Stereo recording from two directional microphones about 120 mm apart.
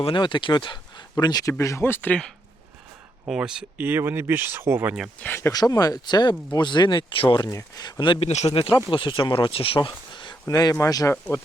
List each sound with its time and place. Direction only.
0.0 s speech: 45° left (ahead or behind); by 2.2 s 15° left (ahead or behind)
3.2 s speech: 5° right (ahead or behind)
5.2 s speech: 20° left (ahead or behind)
5.5 s speech: 30° left (ahead or behind)
8.3 s speech: 70° left (ahead or behind)
8.7 s speech: 45° left (ahead or behind)
10.4 s speech: 30° left (ahead or behind)